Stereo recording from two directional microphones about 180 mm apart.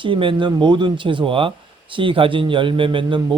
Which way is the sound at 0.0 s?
30° right (ahead or behind).